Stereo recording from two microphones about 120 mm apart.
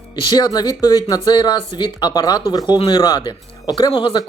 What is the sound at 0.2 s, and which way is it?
Speech, 35° left (ahead or behind).